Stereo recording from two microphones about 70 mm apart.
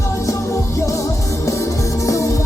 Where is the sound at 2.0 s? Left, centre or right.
Left.